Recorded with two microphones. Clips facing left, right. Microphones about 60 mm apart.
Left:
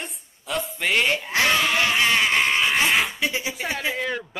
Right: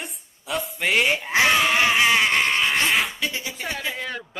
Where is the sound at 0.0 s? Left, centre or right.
Centre.